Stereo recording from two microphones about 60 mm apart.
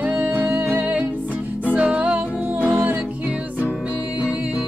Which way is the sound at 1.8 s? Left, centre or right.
Centre.